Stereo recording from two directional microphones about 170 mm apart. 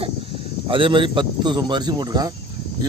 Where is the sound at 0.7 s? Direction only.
30° right (ahead or behind).